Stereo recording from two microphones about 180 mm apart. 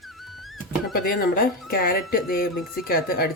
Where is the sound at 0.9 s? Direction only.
55° left (ahead or behind).